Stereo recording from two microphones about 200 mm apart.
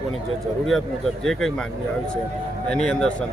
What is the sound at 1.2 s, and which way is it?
Speech, centre (ahead or behind).